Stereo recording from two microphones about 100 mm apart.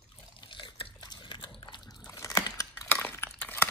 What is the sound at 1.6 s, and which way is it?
Liquid, 50° left (ahead or behind).